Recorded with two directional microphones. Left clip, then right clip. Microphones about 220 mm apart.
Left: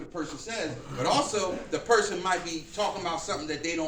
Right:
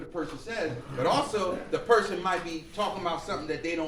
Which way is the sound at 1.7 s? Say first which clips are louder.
Right 1 dB; 15° left (ahead or behind).